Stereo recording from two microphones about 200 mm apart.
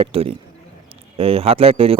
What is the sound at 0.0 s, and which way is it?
A man's voice, 30° right (ahead or behind).